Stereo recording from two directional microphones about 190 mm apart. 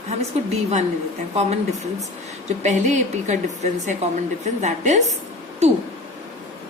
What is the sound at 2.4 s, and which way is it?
Speech, 40° right (ahead or behind).